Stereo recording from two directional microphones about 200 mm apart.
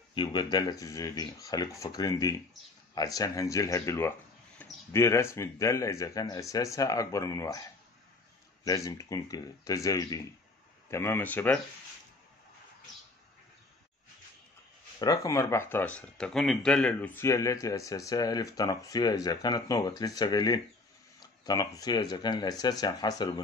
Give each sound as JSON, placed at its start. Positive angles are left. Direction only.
{"t": 0.1, "sound": "speech", "side_deg": 20}
{"t": 8.6, "sound": "speech", "side_deg": 15}
{"t": 15.0, "sound": "speech", "side_deg": 15}